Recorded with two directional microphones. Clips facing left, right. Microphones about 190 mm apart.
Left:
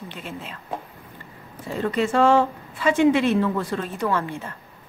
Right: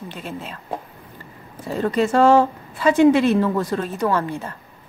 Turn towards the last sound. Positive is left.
turn(degrees=-40)  # may be behind; listen again after turning